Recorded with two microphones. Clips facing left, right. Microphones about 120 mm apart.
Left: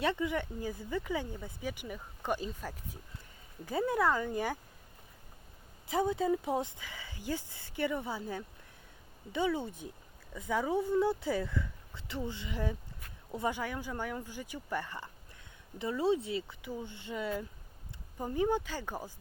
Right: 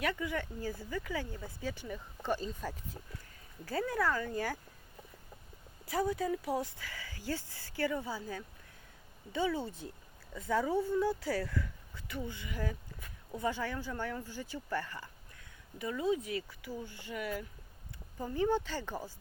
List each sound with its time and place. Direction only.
0.0 s speech: 25° left (ahead or behind)
3.7 s speech: 20° left (ahead or behind)
5.8 s speech: 20° left (ahead or behind)
18.2 s speech: 15° left (ahead or behind)